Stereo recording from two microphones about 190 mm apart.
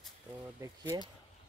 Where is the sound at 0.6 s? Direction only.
15° right (ahead or behind).